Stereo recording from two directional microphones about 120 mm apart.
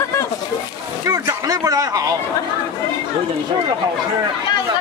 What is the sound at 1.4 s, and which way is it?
Speech, 30° right (ahead or behind).